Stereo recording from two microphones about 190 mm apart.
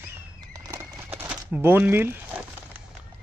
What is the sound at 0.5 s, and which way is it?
Bird, 15° right (ahead or behind).